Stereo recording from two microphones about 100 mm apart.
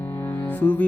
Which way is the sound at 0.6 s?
15° left (ahead or behind).